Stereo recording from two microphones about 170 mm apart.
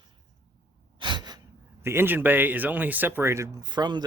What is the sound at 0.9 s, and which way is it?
Gasp, 25° right (ahead or behind).